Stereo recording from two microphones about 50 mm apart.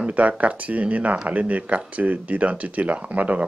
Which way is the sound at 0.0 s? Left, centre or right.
Right.